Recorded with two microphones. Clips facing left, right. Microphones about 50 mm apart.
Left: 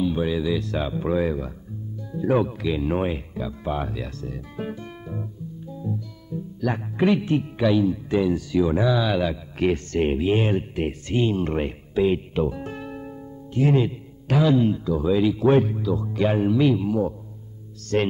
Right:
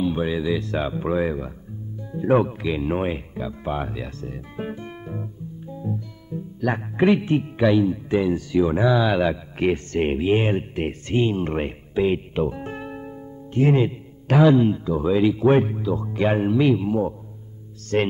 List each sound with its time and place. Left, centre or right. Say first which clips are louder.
0.0 s speech: even; right
5.0 s guitar: left 1 dB; right
5.8 s speech: right 1 dB; right
10.9 s a man's voice: right 2 dB; right
13.6 s a man's voice: right 2 dB; right